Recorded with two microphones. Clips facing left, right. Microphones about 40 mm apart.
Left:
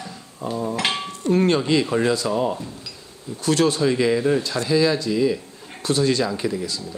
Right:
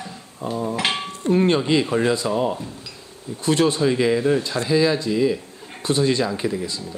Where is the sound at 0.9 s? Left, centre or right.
Right.